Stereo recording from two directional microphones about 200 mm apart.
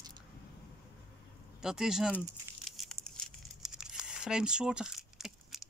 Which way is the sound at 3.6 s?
Centre (ahead or behind).